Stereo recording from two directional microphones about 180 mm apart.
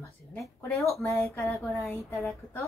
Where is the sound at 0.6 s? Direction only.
15° left (ahead or behind).